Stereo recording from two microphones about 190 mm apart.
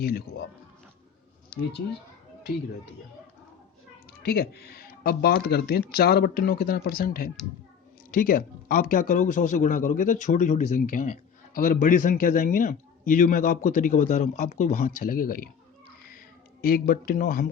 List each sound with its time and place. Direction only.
0.0 s speech: 55° left (ahead or behind)
4.2 s speech: 55° left (ahead or behind)
16.6 s speech: 50° left (ahead or behind)